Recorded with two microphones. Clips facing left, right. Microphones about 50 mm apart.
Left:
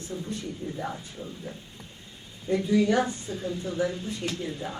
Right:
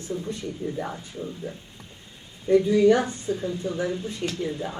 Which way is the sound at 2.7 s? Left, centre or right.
Right.